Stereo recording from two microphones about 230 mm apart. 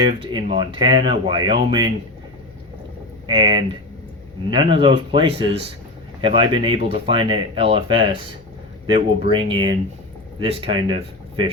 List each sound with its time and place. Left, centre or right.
0.3 s speech: right
3.2 s speech: right